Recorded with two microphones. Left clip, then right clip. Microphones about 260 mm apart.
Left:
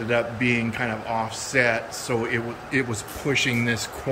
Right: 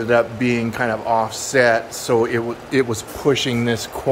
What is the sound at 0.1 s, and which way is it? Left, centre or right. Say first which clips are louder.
Speech: right 5 dB; right.